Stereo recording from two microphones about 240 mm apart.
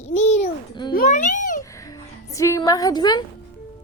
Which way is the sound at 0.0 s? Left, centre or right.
Left.